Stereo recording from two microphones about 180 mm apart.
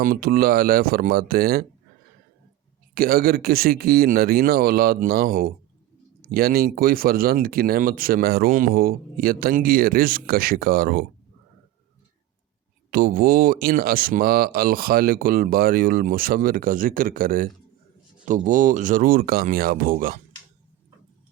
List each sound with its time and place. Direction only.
0.0 s speech: 55° right (ahead or behind)
2.9 s speech: 55° right (ahead or behind)
12.9 s speech: 55° right (ahead or behind)